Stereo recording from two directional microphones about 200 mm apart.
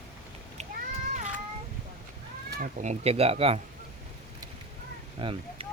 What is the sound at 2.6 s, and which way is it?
Speech, 35° right (ahead or behind).